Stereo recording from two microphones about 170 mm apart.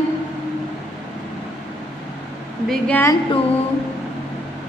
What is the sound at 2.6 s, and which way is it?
Speech, 5° left (ahead or behind).